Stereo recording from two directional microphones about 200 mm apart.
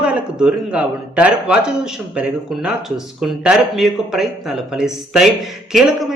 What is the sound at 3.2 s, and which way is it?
Speech, centre (ahead or behind).